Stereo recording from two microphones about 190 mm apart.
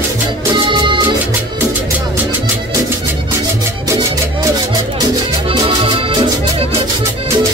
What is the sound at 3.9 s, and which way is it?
Music, 15° right (ahead or behind).